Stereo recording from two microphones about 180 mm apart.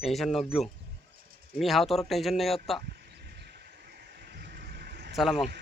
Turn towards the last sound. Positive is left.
turn(degrees=0)  # may be behind; listen again after turning